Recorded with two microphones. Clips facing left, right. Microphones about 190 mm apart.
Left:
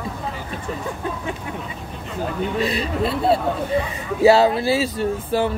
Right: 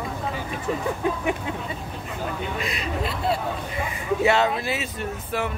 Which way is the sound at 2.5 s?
30° left (ahead or behind).